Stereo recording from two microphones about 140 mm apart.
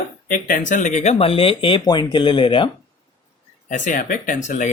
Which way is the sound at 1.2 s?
40° left (ahead or behind).